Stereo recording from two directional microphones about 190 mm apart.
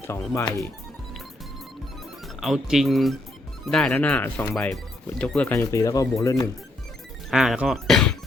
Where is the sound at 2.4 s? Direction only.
Centre (ahead or behind); by 6.5 s 20° left (ahead or behind).